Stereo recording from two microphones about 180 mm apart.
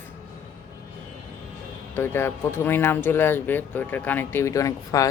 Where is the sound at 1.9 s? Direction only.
10° left (ahead or behind).